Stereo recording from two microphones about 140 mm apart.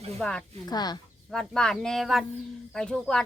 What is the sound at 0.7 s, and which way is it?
Speech, 30° left (ahead or behind).